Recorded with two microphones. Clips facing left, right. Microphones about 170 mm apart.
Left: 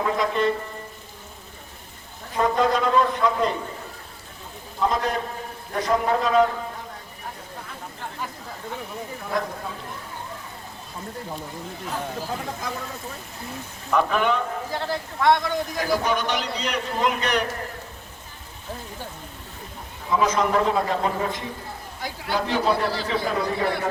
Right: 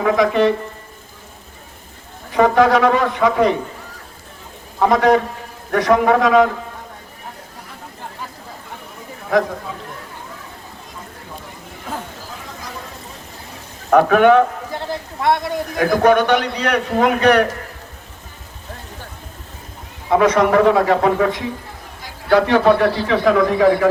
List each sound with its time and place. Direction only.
0.0 s a man's voice: 90° right
2.3 s a man's voice: 80° right
4.8 s a man's voice: 75° right (ahead or behind)
9.3 s speech: 90° right
13.9 s a man's voice: 65° right (ahead or behind)
15.2 s speech: 25° right (ahead or behind)
15.7 s a man's voice: 60° right (ahead or behind)
20.1 s a man's voice: 70° right (ahead or behind); by 23.9 s 90° right